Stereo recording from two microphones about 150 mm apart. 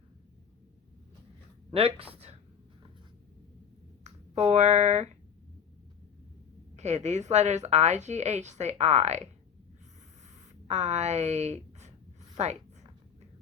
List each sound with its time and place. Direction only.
1.7 s speech: 40° right (ahead or behind)
4.0 s speech: 45° right (ahead or behind)
6.7 s a woman's voice: 50° right (ahead or behind)
10.7 s a woman's voice: 50° right (ahead or behind)